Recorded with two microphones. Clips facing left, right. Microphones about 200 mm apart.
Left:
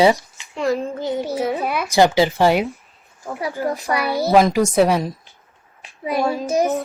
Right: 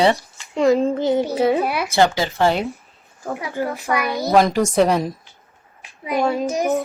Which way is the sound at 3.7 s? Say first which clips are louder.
Even; 35° left (ahead or behind).